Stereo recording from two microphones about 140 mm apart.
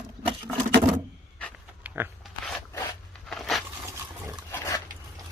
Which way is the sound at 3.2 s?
5° left (ahead or behind).